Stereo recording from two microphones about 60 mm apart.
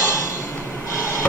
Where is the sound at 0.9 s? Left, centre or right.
Left.